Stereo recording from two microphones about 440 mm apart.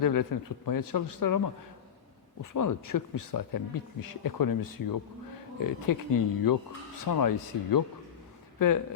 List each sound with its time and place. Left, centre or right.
0.0 s speech: left
2.4 s speech: left